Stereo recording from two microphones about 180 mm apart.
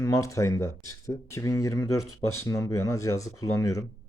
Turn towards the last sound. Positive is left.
turn(degrees=15)  # may be behind; listen again after turning